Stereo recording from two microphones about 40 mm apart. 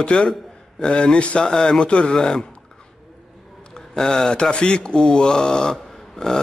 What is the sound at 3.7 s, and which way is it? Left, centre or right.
Speech, centre.